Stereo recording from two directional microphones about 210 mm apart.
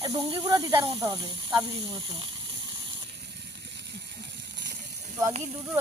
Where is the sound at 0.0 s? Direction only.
20° right (ahead or behind).